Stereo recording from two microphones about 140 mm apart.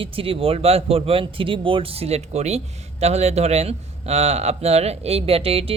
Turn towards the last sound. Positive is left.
turn(degrees=-45)  # may be behind; listen again after turning